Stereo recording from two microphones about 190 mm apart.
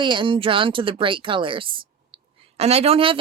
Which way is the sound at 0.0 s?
25° right (ahead or behind).